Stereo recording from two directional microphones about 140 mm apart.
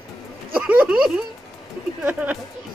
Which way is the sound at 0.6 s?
10° right (ahead or behind).